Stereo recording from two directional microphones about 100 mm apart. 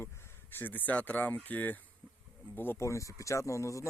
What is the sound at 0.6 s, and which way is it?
Speech, 20° left (ahead or behind).